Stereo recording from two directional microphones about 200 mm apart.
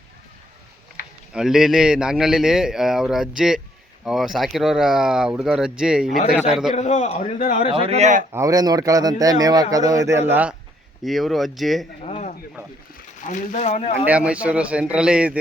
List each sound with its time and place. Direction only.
1.3 s a man's voice: 5° right (ahead or behind)
6.7 s a man's voice: 35° left (ahead or behind)
7.7 s a man's voice: 30° right (ahead or behind)
8.3 s speech: 15° right (ahead or behind)
11.0 s a man's voice: centre (ahead or behind)
12.0 s a sound: 30° left (ahead or behind)
13.2 s a man's voice: 40° left (ahead or behind)
14.0 s a man's voice: 5° right (ahead or behind)